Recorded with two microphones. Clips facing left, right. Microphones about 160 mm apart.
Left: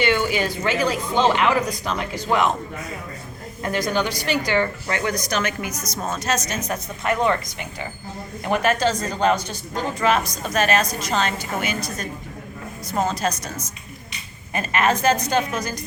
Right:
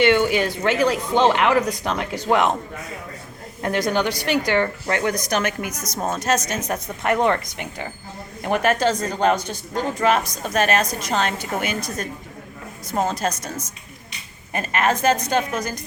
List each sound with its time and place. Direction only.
0.0 s speech: 60° right (ahead or behind)
3.6 s a woman's voice: 65° right (ahead or behind)